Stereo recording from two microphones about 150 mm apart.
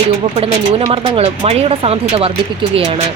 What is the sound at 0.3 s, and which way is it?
A woman's voice, 40° right (ahead or behind).